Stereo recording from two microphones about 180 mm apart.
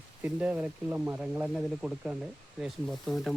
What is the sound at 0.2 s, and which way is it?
Speech, 5° right (ahead or behind).